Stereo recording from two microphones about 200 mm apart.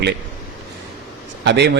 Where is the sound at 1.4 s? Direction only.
55° right (ahead or behind).